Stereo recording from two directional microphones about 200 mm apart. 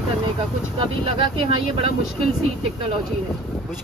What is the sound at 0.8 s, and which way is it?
Speech, 25° right (ahead or behind).